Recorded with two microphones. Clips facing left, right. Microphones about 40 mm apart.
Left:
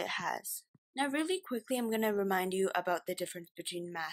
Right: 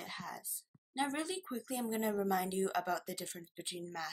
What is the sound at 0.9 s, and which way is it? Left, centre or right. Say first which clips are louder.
A woman's voice: left 4 dB; left.